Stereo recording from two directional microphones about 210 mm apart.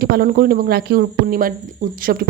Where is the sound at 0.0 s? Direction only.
45° right (ahead or behind).